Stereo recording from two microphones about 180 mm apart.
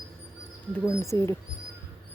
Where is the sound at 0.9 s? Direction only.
15° left (ahead or behind).